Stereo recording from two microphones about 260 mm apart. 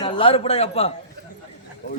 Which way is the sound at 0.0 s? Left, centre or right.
Left.